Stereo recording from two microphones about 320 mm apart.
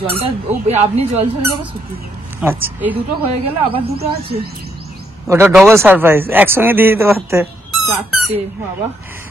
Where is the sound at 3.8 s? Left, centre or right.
Right.